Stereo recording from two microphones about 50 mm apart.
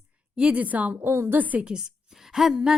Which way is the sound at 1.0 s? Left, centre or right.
Right.